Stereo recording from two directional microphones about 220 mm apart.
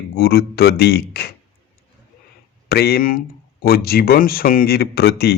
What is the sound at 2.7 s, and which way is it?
Speech, 45° left (ahead or behind).